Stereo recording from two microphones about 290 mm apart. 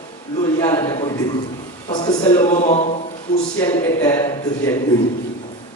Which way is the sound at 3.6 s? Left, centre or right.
Centre.